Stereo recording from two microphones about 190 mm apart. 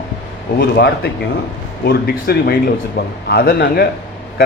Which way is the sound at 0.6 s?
55° left (ahead or behind).